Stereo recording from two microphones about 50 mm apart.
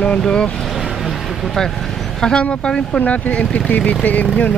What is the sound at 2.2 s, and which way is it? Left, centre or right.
Speech, centre.